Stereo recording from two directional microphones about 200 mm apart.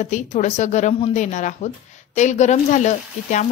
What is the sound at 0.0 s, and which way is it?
A woman's voice, 35° left (ahead or behind).